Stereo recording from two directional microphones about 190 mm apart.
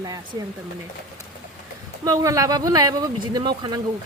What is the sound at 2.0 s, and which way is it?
Speech, 15° right (ahead or behind).